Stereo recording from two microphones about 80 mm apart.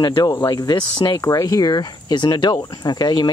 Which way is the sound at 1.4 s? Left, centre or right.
Left.